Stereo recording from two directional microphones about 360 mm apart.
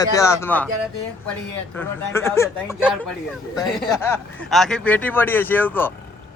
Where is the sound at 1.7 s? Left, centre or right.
Centre.